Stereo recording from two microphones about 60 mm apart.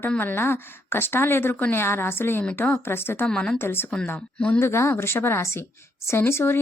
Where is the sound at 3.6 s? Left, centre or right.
Left.